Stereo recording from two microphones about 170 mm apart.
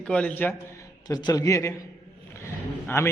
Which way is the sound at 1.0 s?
20° left (ahead or behind).